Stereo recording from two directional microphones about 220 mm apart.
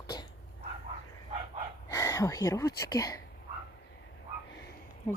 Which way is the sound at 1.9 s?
15° left (ahead or behind).